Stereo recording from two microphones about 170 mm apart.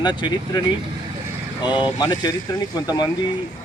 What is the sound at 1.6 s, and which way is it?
Speech, 25° left (ahead or behind).